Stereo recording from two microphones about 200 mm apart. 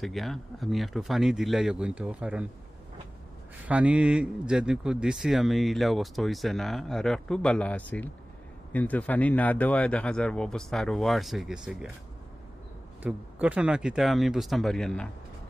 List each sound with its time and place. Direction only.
0.0 s speech: centre (ahead or behind)
3.6 s speech: 5° right (ahead or behind)
13.0 s speech: 5° right (ahead or behind)